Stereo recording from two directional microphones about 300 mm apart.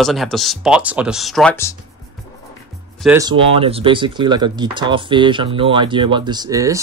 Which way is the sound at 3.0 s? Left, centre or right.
Centre.